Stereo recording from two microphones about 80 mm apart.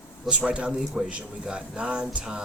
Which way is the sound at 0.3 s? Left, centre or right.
Centre.